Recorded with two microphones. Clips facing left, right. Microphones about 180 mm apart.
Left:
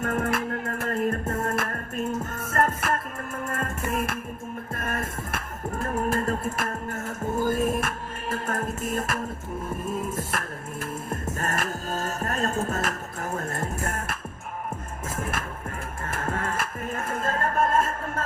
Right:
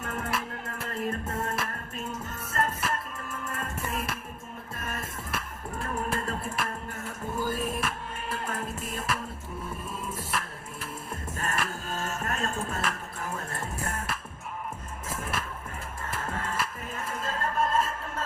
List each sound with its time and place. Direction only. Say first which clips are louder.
0.0 s music: left 7 dB; 50° left (ahead or behind)
10.3 s music: left 3 dB; 50° left (ahead or behind)
15.2 s music: left 4 dB; 50° left (ahead or behind)